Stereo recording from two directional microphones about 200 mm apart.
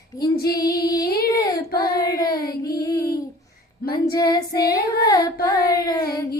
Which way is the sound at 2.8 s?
15° left (ahead or behind).